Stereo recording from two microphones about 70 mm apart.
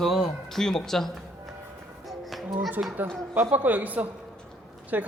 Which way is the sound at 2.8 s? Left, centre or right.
Right.